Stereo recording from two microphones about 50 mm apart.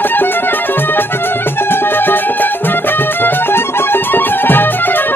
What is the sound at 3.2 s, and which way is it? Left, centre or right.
Music, left.